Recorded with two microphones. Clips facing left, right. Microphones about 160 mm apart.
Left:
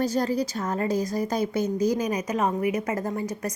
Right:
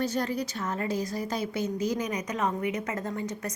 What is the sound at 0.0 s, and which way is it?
A woman's voice, 35° left (ahead or behind).